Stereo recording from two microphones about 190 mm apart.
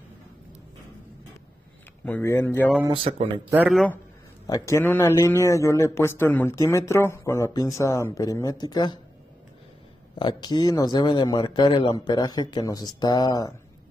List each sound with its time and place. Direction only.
2.0 s a man's voice: 10° left (ahead or behind)
2.9 s speech: 30° right (ahead or behind)
3.7 s a man's voice: 5° left (ahead or behind); by 9.0 s 20° left (ahead or behind)
10.1 s a man's voice: 25° left (ahead or behind)